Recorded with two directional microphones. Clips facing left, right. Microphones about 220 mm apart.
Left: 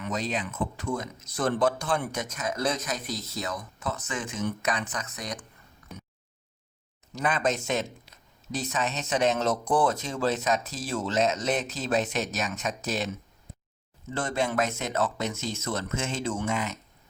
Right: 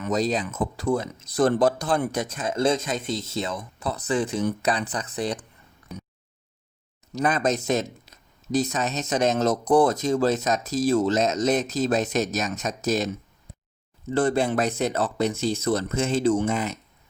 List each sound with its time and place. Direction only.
0.0 s speech: 40° right (ahead or behind)
5.9 s a sound: centre (ahead or behind)
7.2 s speech: 40° right (ahead or behind)
14.1 s speech: 35° right (ahead or behind)